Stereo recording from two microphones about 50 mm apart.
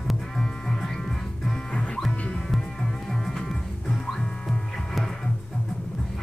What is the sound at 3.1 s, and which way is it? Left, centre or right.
Music, centre.